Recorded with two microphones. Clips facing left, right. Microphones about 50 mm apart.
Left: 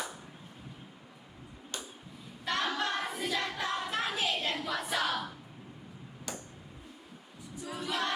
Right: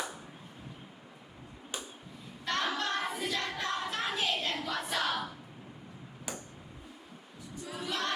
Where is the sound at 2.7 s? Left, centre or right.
Centre.